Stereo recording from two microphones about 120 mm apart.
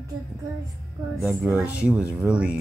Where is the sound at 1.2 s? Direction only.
5° right (ahead or behind).